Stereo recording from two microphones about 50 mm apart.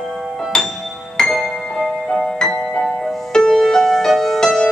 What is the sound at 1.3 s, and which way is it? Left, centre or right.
Music, centre.